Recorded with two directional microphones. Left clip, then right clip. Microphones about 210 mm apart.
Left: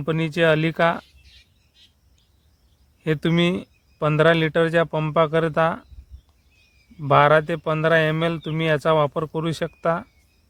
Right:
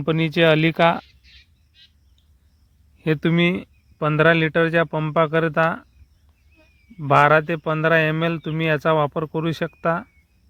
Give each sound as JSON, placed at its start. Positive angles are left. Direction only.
{"t": 0.0, "sound": "speech", "side_deg": -25}
{"t": 1.2, "sound": "a sound", "side_deg": -15}
{"t": 3.0, "sound": "a man's voice", "side_deg": -15}
{"t": 7.0, "sound": "a man's voice", "side_deg": -15}